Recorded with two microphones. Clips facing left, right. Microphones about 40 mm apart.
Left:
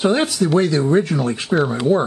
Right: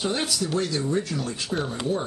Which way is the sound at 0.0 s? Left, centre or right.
Left.